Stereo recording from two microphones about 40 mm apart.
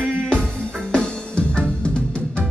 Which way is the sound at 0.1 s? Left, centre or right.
Left.